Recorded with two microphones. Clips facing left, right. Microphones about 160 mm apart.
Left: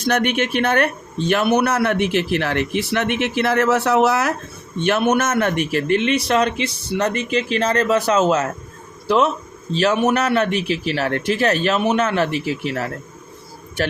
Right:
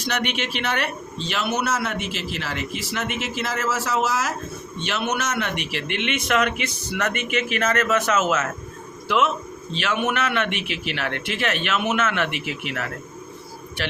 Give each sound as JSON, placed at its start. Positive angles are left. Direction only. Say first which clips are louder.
{"t": 0.0, "sound": "a man's voice", "louder": "left 7 dB", "side_deg": 50}
{"t": 4.8, "sound": "a man's voice", "louder": "left 9 dB", "side_deg": 55}